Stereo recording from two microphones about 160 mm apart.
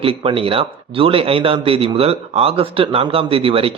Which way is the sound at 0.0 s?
35° right (ahead or behind).